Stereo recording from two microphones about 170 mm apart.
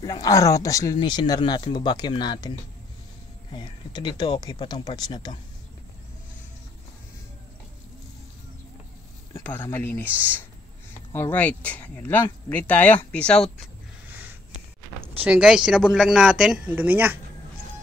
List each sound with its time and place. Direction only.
0.0 s speech: 20° left (ahead or behind)
3.5 s speech: 25° left (ahead or behind)
9.3 s speech: 10° left (ahead or behind)
11.3 s speech: 10° left (ahead or behind)
15.0 s speech: 10° right (ahead or behind)